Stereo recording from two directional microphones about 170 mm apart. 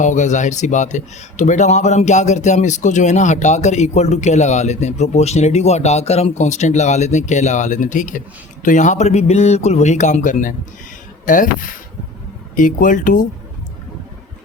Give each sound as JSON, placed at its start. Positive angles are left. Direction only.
{"t": 0.0, "sound": "speech", "side_deg": 45}